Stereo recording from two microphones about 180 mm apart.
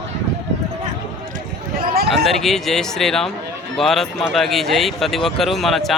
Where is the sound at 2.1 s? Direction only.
Centre (ahead or behind).